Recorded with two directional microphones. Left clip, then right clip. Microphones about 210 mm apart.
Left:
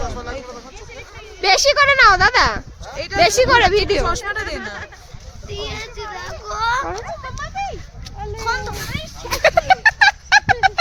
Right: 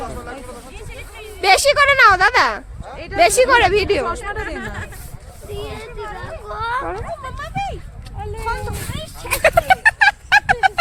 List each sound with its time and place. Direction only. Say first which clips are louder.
1.4 s speech: right 1 dB; 15° right (ahead or behind)
4.0 s speech: left 2 dB; 45° left (ahead or behind)
4.4 s chatter: left 1 dB; 50° right (ahead or behind)
5.5 s children playing: left 2 dB; 35° left (ahead or behind)
7.2 s a sound: right 1 dB; 60° right (ahead or behind)
8.4 s a sound: left 3 dB; 5° left (ahead or behind)
9.4 s fowl: even; 5° right (ahead or behind)